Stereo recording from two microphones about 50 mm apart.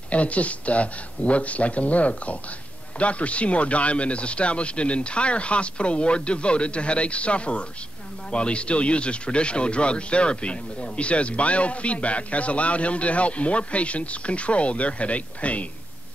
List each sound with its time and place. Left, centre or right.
0.1 s speech: left